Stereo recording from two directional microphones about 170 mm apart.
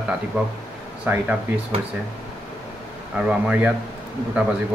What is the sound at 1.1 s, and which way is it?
Speech, 10° right (ahead or behind).